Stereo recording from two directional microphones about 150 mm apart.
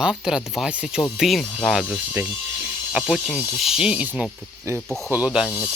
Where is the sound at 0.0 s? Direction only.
5° right (ahead or behind).